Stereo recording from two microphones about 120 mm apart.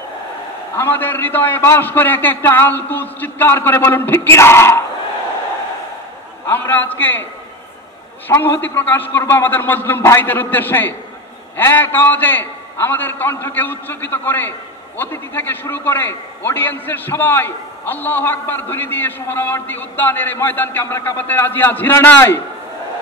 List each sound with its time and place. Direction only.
0.7 s a man's voice: 15° left (ahead or behind)
6.4 s a man's voice: 15° left (ahead or behind)
8.3 s a man's voice: 15° left (ahead or behind)